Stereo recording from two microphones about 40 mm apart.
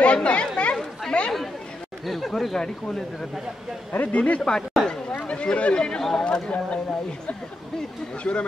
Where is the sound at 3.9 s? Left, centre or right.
Left.